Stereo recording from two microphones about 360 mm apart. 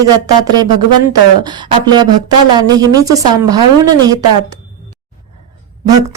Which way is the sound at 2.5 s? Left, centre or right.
Centre.